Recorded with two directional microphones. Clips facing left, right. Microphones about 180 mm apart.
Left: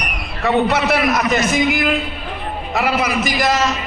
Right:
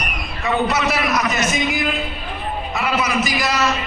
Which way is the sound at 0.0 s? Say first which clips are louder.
Left 4 dB; 60° left (ahead or behind).